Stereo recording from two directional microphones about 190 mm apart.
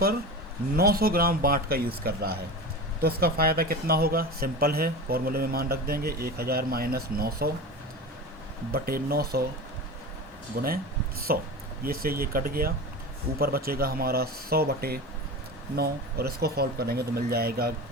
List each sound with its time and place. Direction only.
0.8 s speech: 50° right (ahead or behind)
8.7 s speech: 50° right (ahead or behind)
10.5 s speech: 50° right (ahead or behind)